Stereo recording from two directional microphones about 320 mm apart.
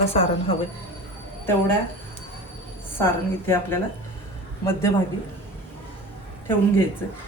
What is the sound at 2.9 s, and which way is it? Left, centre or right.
Speech, centre.